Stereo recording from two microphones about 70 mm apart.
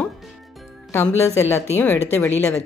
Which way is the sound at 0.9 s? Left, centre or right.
Left.